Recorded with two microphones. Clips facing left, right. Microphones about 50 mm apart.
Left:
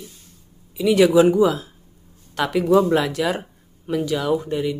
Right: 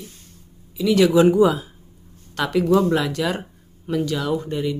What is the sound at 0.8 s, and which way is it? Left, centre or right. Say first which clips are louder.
Speech: left 1 dB; centre.